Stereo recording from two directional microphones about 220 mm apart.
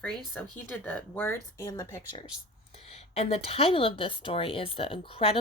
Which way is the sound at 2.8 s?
30° left (ahead or behind).